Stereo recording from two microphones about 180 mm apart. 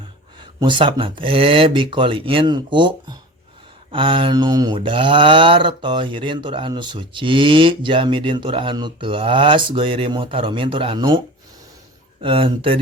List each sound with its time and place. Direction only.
0.3 s speech: 25° right (ahead or behind)
12.2 s speech: 30° right (ahead or behind)